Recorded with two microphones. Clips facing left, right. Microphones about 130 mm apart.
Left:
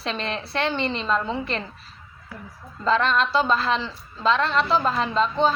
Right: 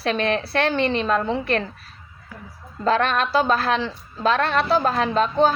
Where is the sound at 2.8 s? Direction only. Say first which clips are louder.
Right 1 dB; 60° right (ahead or behind).